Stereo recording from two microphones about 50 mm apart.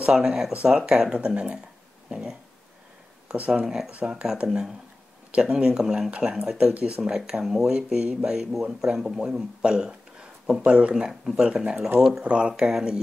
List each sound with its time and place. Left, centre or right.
0.0 s speech: centre
2.0 s a sound: centre
3.3 s speech: right
3.6 s speech: centre; by 7.0 s right
7.0 s speech: centre
7.7 s speech: centre
10.7 s speech: right
12.3 s speech: right